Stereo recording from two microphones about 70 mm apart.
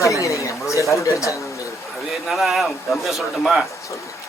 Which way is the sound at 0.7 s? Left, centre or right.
Left.